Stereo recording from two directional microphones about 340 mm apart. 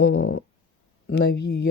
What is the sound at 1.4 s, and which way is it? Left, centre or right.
Speech, left.